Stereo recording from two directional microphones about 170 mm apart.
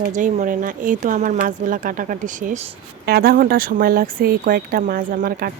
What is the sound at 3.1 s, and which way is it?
Speech, 60° right (ahead or behind).